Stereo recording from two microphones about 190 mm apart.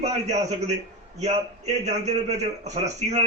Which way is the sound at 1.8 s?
35° right (ahead or behind).